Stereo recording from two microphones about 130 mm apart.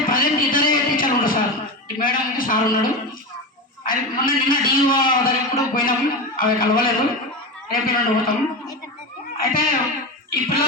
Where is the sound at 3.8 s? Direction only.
90° left.